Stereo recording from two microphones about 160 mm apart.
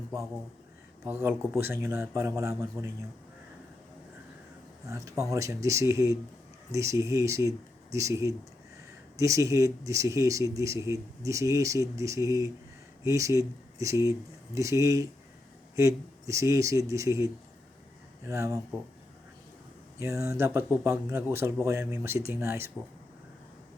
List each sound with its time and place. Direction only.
1.0 s speech: 15° right (ahead or behind)
4.9 s speech: 20° right (ahead or behind)
20.0 s speech: 20° right (ahead or behind)